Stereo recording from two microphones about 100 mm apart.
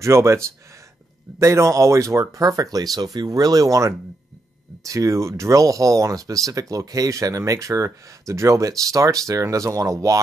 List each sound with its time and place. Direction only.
0.0 s speech: 30° right (ahead or behind)
1.4 s speech: 30° right (ahead or behind)